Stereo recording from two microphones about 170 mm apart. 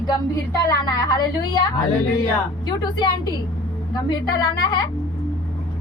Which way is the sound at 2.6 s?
25° left (ahead or behind).